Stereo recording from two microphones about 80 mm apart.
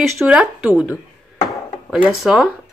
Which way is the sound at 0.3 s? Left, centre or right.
Centre.